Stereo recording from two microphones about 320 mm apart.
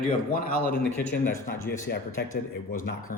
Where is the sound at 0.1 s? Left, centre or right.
Left.